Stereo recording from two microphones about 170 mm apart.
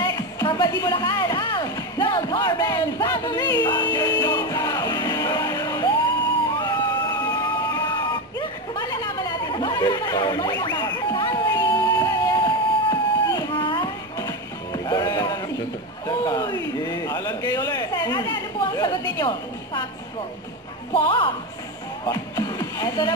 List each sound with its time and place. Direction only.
0.0 s music: 25° left (ahead or behind)
8.4 s a sound: 25° left (ahead or behind)
11.5 s music: 25° left (ahead or behind)
16.3 s a sound: 20° left (ahead or behind)
20.9 s speech: 30° left (ahead or behind)
22.0 s music: 25° left (ahead or behind)